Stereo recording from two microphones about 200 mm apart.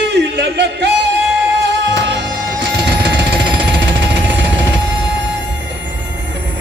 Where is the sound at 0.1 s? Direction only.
60° right (ahead or behind).